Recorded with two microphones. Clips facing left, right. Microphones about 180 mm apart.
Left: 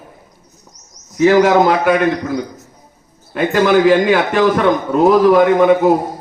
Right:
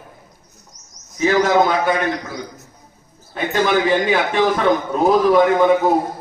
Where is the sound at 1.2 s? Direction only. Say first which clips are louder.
Left 5 dB; 75° left (ahead or behind).